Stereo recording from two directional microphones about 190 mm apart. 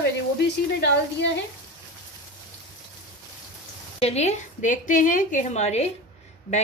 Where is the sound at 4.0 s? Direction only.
35° left (ahead or behind).